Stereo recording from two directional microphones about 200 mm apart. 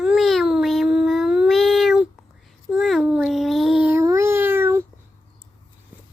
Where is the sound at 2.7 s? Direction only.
Centre (ahead or behind).